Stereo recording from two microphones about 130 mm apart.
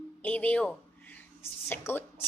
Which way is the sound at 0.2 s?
10° left (ahead or behind).